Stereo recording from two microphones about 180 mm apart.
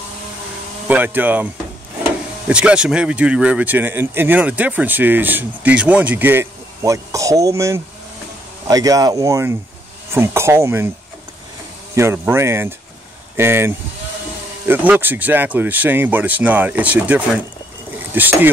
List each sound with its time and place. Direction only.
0.8 s speech: 10° right (ahead or behind)
11.9 s speech: 15° right (ahead or behind)